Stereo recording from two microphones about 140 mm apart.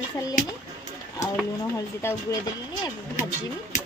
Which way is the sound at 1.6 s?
20° left (ahead or behind).